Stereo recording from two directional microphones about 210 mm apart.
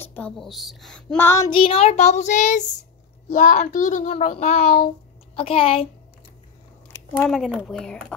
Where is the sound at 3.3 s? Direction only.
40° left (ahead or behind).